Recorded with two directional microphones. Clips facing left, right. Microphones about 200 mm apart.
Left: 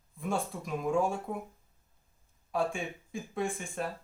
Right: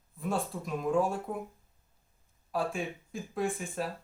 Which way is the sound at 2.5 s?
Centre (ahead or behind).